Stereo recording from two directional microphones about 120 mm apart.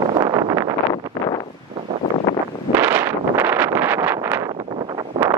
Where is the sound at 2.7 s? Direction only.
15° right (ahead or behind).